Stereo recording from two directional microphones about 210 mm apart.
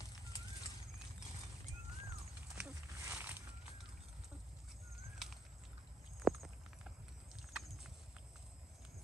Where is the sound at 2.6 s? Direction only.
10° right (ahead or behind).